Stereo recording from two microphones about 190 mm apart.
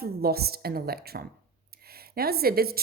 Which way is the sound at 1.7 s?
55° right (ahead or behind).